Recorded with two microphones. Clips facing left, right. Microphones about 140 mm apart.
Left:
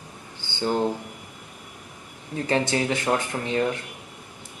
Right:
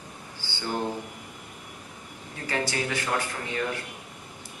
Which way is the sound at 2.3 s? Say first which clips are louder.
Left 6 dB; 20° left (ahead or behind).